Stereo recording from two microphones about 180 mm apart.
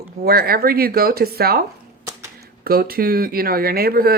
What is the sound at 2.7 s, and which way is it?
Speech, 55° right (ahead or behind).